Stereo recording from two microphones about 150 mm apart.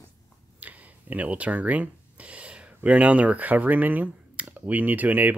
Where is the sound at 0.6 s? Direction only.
10° right (ahead or behind).